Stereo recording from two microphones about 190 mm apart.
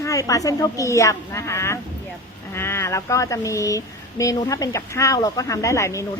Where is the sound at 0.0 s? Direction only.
15° left (ahead or behind).